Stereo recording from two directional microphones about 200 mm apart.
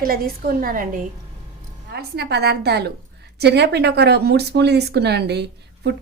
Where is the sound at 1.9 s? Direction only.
55° right (ahead or behind).